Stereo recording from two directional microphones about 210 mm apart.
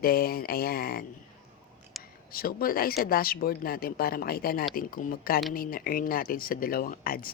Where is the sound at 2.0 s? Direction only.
Centre (ahead or behind).